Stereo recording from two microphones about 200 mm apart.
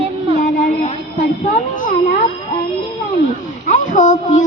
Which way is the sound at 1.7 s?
40° left (ahead or behind).